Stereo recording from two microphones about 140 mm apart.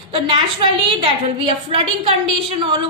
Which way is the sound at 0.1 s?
35° right (ahead or behind).